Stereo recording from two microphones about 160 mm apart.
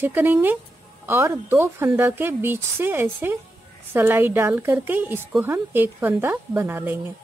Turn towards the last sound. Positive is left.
turn(degrees=-15)  # may be behind; listen again after turning